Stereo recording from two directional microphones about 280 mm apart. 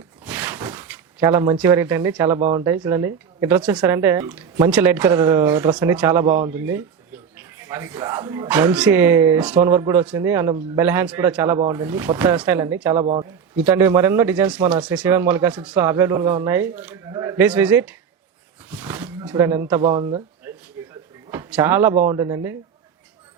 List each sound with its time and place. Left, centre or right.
0.3 s a sound: centre
2.6 s a man's voice: centre
6.2 s speech: right
6.5 s a man's voice: centre
20.8 s a sound: centre
22.0 s a man's voice: centre